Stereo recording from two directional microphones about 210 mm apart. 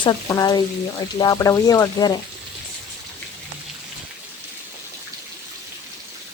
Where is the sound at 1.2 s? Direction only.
15° left (ahead or behind).